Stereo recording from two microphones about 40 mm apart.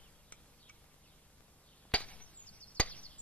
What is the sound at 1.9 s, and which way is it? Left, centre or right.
Chop, left.